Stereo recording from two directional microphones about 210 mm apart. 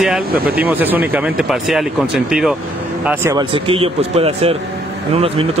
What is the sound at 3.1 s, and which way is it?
Speech, 15° right (ahead or behind).